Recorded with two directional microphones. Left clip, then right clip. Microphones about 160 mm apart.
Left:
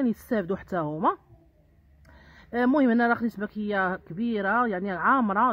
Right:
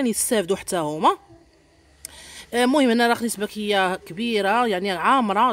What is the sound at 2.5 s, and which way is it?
Speech, 5° right (ahead or behind).